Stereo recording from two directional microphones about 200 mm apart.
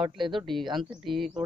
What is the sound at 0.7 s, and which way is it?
Speech, centre (ahead or behind).